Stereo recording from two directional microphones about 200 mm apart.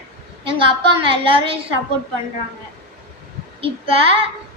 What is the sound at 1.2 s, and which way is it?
Speech, 25° right (ahead or behind).